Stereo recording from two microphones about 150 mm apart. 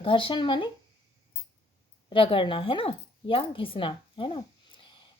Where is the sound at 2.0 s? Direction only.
35° left (ahead or behind).